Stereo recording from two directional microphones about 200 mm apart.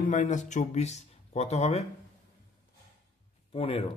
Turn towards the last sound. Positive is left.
turn(degrees=30)  # may be behind; listen again after turning